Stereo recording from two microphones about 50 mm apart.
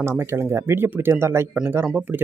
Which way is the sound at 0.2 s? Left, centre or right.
Right.